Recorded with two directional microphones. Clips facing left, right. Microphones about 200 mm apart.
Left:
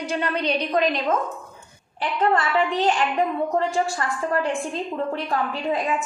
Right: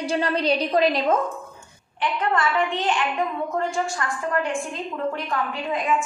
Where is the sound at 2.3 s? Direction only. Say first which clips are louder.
Left 1 dB; 40° left (ahead or behind).